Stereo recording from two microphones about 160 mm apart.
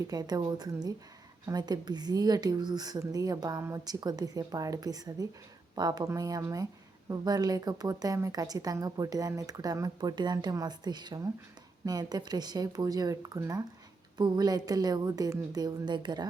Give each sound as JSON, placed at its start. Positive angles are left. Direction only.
{"t": 0.0, "sound": "a woman's voice", "side_deg": -25}